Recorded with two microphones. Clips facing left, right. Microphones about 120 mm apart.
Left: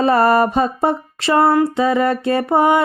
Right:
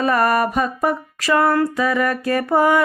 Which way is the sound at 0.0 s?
30° left (ahead or behind).